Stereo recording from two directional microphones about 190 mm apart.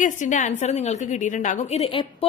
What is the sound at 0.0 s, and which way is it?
A woman's voice, 40° left (ahead or behind).